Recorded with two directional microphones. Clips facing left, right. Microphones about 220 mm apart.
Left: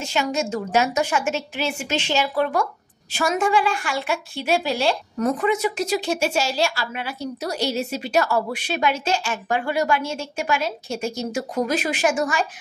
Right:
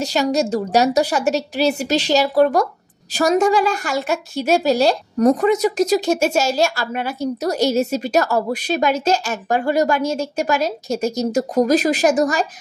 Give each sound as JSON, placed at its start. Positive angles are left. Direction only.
{"t": 0.0, "sound": "a woman's voice", "side_deg": -40}